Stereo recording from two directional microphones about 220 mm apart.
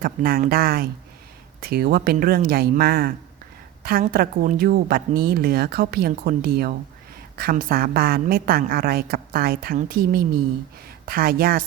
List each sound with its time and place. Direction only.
0.0 s a woman's voice: 40° right (ahead or behind)